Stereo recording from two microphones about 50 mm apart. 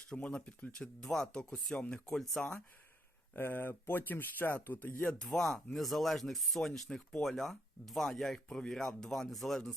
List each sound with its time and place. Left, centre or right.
0.0 s speech: left
3.3 s speech: left
5.2 s speech: centre